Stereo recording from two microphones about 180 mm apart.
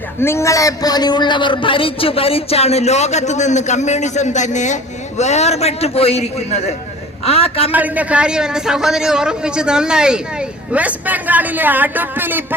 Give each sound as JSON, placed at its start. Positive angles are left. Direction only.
{"t": 0.2, "sound": "speech", "side_deg": 15}
{"t": 7.7, "sound": "a man's voice", "side_deg": -10}